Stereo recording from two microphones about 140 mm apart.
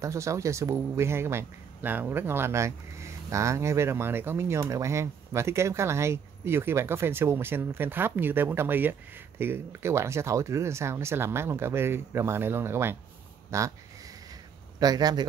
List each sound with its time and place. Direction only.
0.0 s speech: 20° right (ahead or behind)
13.5 s a sound: 20° right (ahead or behind)
14.8 s a man's voice: 30° right (ahead or behind)